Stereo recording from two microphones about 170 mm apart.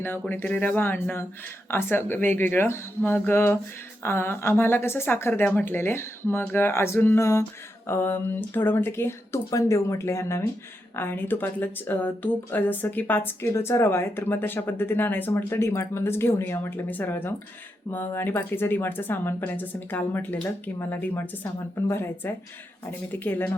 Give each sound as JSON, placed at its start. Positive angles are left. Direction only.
{"t": 0.0, "sound": "speech", "side_deg": 10}